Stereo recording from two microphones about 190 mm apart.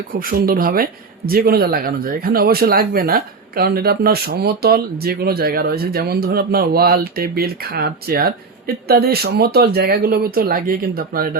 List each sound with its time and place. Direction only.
0.1 s speech: 50° right (ahead or behind)